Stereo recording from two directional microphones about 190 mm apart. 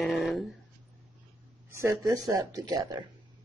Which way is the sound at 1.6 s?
15° right (ahead or behind).